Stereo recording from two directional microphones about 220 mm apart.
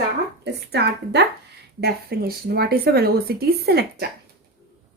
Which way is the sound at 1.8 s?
45° right (ahead or behind).